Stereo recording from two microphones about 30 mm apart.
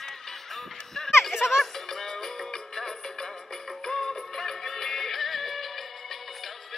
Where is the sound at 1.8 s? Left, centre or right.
Centre.